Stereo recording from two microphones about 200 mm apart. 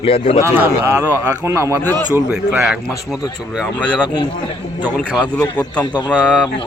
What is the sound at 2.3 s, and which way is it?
Speech, 5° right (ahead or behind).